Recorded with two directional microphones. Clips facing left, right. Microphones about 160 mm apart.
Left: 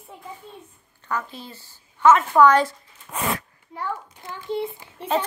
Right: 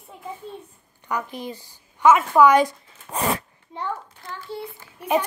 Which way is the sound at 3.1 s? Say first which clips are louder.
Right 2 dB; 35° right (ahead or behind).